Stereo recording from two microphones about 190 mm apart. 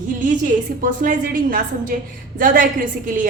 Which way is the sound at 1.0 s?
45° right (ahead or behind).